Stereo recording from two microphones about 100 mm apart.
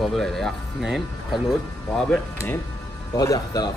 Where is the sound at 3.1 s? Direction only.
35° left (ahead or behind).